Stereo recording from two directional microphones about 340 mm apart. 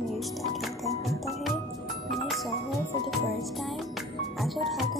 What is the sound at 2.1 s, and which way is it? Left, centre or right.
Music, centre.